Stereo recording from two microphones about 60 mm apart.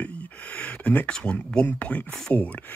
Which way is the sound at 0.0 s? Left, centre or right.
Left.